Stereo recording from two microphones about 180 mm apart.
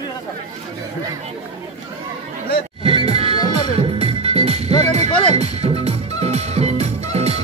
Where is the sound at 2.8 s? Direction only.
30° right (ahead or behind).